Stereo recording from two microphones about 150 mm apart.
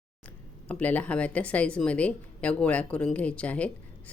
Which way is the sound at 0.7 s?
10° left (ahead or behind).